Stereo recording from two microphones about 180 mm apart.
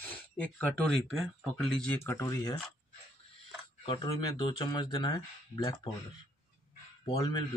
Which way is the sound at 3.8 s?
25° left (ahead or behind).